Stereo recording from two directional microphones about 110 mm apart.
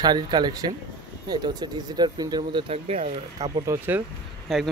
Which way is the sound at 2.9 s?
65° right (ahead or behind).